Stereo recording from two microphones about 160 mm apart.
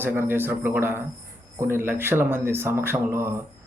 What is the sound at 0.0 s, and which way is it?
Speech, 15° right (ahead or behind).